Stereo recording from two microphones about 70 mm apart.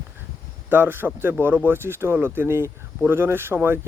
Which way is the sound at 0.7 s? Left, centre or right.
Right.